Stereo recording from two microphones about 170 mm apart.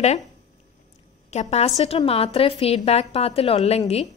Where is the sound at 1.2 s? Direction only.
40° left (ahead or behind).